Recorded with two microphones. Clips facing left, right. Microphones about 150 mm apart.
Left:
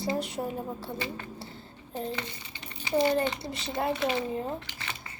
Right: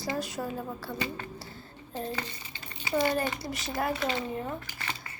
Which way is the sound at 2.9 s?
25° left (ahead or behind).